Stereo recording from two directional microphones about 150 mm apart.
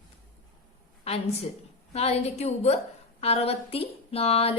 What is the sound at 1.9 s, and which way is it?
A woman's voice, 45° left (ahead or behind).